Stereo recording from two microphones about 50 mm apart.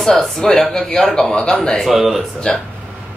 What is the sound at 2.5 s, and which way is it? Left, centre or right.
Speech, centre.